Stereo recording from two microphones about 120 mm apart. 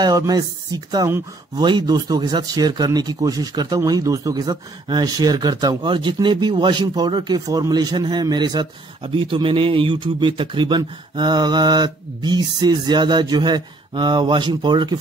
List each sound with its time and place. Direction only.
0.0 s speech: 35° right (ahead or behind)